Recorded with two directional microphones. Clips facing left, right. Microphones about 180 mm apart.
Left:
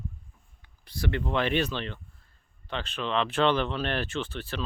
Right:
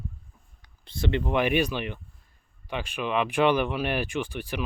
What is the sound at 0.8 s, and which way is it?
Speech, 25° right (ahead or behind).